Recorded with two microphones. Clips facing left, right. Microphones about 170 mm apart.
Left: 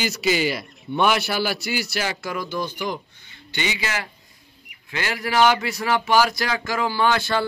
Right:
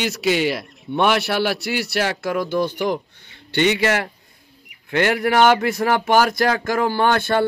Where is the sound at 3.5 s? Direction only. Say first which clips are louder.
Right 10 dB; 65° right (ahead or behind).